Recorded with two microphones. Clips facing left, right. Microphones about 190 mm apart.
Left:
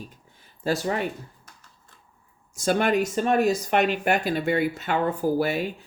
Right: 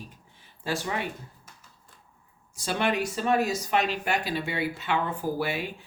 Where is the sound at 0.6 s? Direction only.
40° left (ahead or behind).